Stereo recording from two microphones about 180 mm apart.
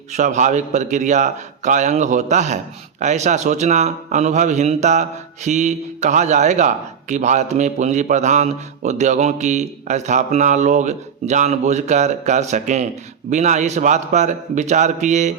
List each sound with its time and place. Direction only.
0.1 s a man's voice: 40° right (ahead or behind)